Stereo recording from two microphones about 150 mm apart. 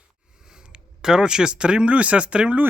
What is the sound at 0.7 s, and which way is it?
Speech, 5° right (ahead or behind).